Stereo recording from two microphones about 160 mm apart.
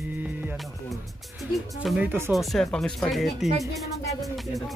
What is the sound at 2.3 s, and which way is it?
Speech, centre (ahead or behind).